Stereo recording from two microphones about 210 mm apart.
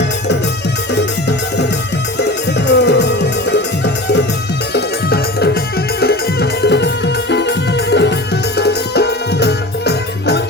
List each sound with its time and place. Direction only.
2.1 s music: 55° left (ahead or behind)
4.7 s music: 50° left (ahead or behind)